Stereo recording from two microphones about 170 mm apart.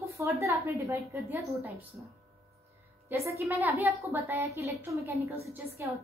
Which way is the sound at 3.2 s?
15° right (ahead or behind).